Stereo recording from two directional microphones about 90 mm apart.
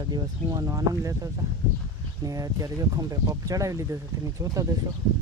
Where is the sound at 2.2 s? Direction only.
40° right (ahead or behind).